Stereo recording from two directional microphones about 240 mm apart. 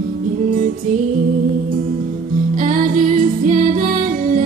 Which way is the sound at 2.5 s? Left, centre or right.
Right.